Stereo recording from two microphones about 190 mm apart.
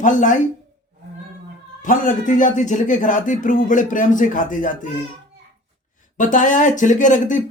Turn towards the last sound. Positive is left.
turn(degrees=40)  # may be behind; listen again after turning